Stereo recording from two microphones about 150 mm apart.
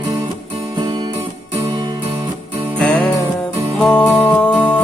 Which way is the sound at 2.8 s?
10° left (ahead or behind).